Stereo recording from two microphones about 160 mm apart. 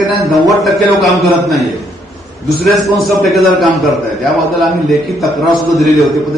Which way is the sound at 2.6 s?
Centre (ahead or behind).